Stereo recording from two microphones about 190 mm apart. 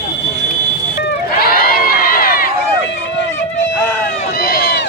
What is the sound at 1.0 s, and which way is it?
Run, 55° left (ahead or behind).